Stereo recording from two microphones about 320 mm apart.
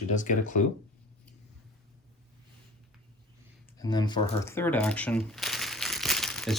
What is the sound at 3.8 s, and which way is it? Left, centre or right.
Speech, centre.